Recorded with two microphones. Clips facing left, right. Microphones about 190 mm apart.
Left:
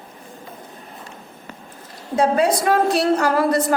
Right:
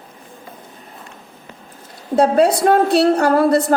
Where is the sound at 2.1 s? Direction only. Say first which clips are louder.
Right 4 dB; 65° right (ahead or behind).